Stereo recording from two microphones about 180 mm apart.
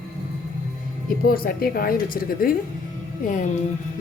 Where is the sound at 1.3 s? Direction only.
55° left (ahead or behind).